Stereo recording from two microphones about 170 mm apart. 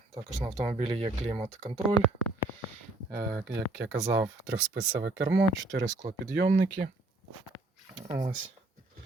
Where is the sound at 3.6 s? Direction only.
90° right.